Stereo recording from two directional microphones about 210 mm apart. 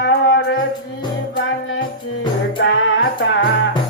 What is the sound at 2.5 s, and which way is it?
Music, 65° left (ahead or behind).